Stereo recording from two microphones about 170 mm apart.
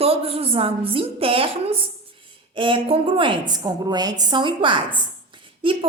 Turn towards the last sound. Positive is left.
turn(degrees=-30)  # may be behind; listen again after turning